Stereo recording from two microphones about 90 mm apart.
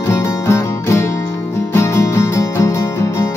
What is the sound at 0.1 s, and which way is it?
Music, 30° left (ahead or behind).